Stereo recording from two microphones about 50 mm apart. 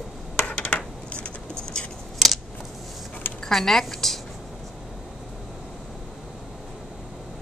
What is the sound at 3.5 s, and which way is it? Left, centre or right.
Speech, centre.